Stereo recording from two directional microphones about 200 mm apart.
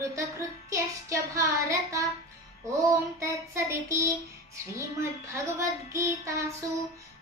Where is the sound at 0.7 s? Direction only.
15° right (ahead or behind).